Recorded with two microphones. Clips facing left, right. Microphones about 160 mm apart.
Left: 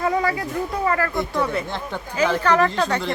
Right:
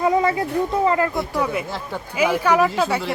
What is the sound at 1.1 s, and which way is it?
Speech, 5° right (ahead or behind).